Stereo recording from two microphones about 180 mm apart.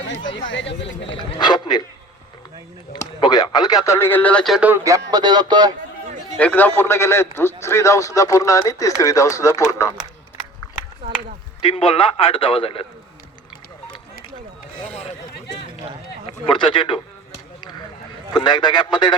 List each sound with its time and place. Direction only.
0.1 s speech: 90° left
1.1 s speech: 25° left (ahead or behind)
2.9 s a man's voice: 25° left (ahead or behind); by 4.7 s centre (ahead or behind)
4.7 s speech: 15° right (ahead or behind)
6.3 s a man's voice: 10° left (ahead or behind)
11.6 s a man's voice: 30° left (ahead or behind)
16.2 s speech: 25° left (ahead or behind)
17.6 s a sound: 25° left (ahead or behind)
18.4 s speech: 25° left (ahead or behind)